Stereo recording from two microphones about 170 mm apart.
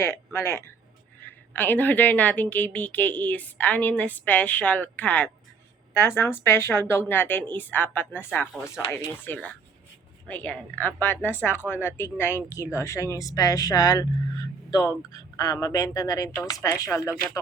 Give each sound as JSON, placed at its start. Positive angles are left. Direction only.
{"t": 0.3, "sound": "a woman's voice", "side_deg": 15}